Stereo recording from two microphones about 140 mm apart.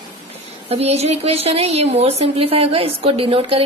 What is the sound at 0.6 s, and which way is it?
A woman's voice, 45° right (ahead or behind).